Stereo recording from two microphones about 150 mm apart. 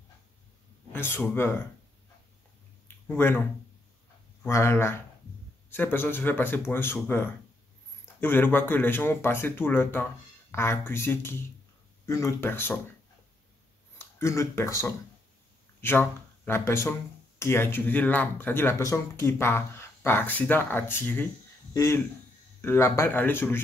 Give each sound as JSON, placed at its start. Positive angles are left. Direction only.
{"t": 0.9, "sound": "speech", "side_deg": 15}
{"t": 3.1, "sound": "speech", "side_deg": 15}
{"t": 13.9, "sound": "speech", "side_deg": 15}